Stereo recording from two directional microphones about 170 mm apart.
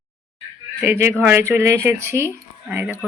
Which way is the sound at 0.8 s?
15° right (ahead or behind).